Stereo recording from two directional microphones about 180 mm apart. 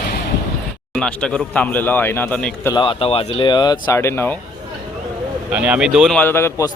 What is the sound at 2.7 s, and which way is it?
A man's voice, 30° left (ahead or behind).